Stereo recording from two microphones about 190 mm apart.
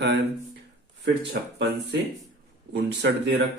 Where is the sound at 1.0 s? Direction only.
65° right (ahead or behind).